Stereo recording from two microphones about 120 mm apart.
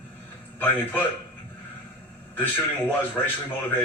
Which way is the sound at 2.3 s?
15° left (ahead or behind).